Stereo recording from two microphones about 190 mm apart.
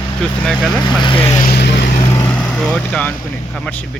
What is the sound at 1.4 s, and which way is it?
Vehicle, 55° left (ahead or behind).